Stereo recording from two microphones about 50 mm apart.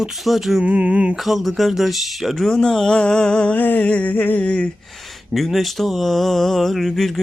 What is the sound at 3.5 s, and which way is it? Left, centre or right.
Music, left.